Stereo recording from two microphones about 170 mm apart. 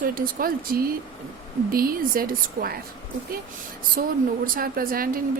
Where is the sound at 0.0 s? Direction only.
60° right (ahead or behind).